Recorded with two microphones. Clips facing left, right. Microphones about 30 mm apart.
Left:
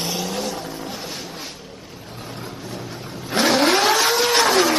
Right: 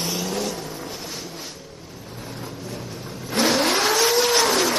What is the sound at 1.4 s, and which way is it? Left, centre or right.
Vehicle, left.